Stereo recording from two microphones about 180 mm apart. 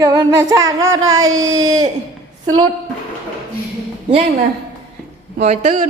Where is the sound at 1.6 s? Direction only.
20° right (ahead or behind).